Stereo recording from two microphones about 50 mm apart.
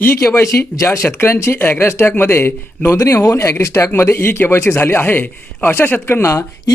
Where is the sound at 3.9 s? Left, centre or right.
Left.